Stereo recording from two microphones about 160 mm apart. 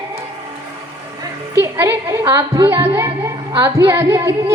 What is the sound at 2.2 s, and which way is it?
Speech, 30° right (ahead or behind).